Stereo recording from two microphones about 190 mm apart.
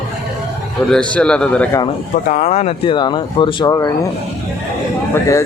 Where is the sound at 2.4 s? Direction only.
35° left (ahead or behind).